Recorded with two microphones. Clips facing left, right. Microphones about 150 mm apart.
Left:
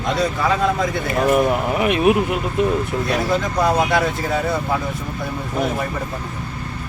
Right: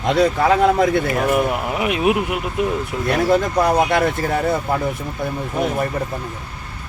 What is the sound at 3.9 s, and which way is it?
Speech, 55° right (ahead or behind).